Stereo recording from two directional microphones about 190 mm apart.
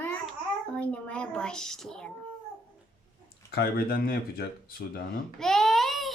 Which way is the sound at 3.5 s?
55° left (ahead or behind).